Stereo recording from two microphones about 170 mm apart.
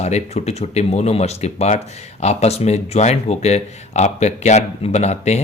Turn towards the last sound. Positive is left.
turn(degrees=40)  # may be behind; listen again after turning